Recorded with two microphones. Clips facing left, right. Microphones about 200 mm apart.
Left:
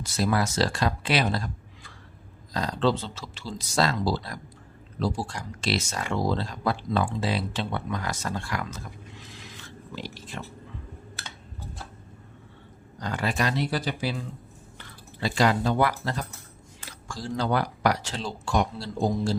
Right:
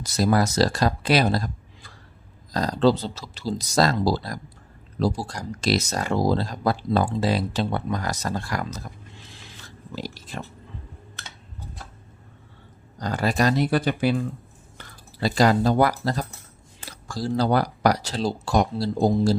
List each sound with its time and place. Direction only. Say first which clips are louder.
0.0 s speech: right 4 dB; 40° right (ahead or behind)
13.0 s speech: right 5 dB; 40° right (ahead or behind); by 14.3 s 55° right (ahead or behind)
14.8 s speech: right 4 dB; 40° right (ahead or behind)